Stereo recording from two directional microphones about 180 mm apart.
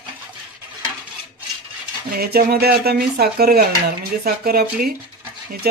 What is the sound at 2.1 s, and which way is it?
Speech, 60° right (ahead or behind).